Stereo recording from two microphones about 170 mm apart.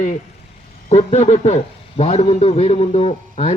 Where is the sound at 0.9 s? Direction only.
40° left (ahead or behind).